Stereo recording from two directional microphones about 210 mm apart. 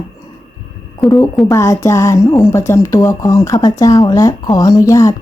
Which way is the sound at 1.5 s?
15° left (ahead or behind).